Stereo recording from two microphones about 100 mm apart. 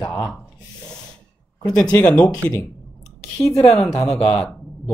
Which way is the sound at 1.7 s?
10° left (ahead or behind).